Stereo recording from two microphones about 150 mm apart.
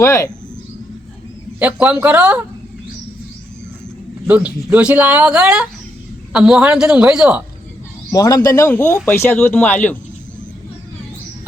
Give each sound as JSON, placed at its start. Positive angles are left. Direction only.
{"t": 0.0, "sound": "speech", "side_deg": 20}
{"t": 1.5, "sound": "speech", "side_deg": -10}
{"t": 4.3, "sound": "a woman's voice", "side_deg": -10}
{"t": 8.1, "sound": "speech", "side_deg": 25}